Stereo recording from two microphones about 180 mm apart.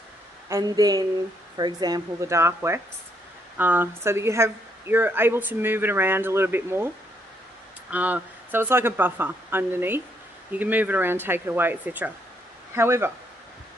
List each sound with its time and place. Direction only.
0.5 s speech: 20° right (ahead or behind)
7.9 s speech: 10° right (ahead or behind)